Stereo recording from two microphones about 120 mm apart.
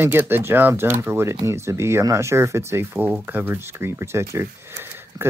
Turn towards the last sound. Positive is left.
turn(degrees=-20)  # may be behind; listen again after turning